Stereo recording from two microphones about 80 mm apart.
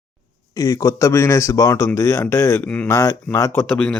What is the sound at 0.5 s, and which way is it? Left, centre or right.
Speech, left.